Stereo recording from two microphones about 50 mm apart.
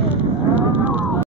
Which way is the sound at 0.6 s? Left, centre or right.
Right.